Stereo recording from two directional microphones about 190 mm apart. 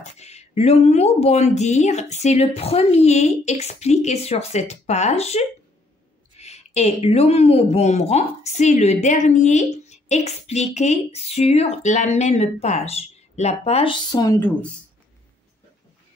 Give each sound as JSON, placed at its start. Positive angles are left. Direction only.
{"t": 0.0, "sound": "a woman's voice", "side_deg": 35}
{"t": 14.1, "sound": "speech", "side_deg": 15}